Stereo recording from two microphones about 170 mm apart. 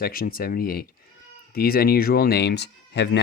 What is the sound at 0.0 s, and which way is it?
Speech, 60° left (ahead or behind).